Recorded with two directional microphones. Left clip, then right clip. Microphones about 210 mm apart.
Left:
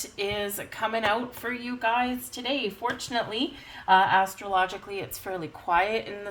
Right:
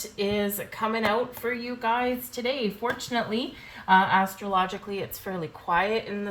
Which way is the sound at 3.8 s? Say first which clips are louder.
Even; 45° left (ahead or behind).